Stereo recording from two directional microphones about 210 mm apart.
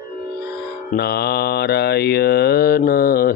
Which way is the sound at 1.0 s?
50° left (ahead or behind).